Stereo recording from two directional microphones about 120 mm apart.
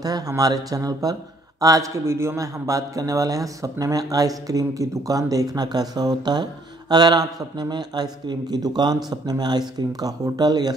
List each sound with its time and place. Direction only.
0.0 s a man's voice: 30° right (ahead or behind)